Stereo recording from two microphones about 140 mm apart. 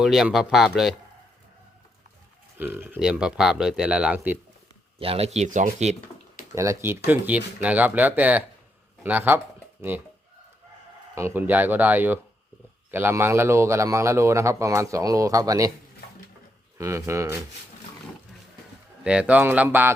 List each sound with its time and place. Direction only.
0.0 s speech: centre (ahead or behind)
2.6 s speech: 15° right (ahead or behind)
4.9 s speech: 45° right (ahead or behind)
6.5 s speech: 20° right (ahead or behind)
11.1 s a man's voice: 15° right (ahead or behind)
16.7 s a man's voice: 20° right (ahead or behind)
19.0 s speech: 10° right (ahead or behind)